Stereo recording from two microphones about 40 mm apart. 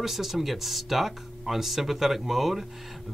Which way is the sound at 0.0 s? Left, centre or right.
Centre.